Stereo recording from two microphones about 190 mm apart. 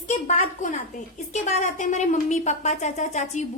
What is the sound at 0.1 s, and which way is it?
A woman's voice, 40° left (ahead or behind).